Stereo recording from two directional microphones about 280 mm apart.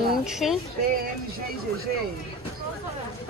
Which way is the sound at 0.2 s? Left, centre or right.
Centre.